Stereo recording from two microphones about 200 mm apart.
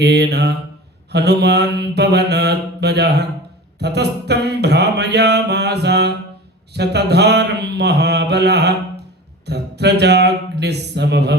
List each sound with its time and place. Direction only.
0.0 s mantra: 55° right (ahead or behind)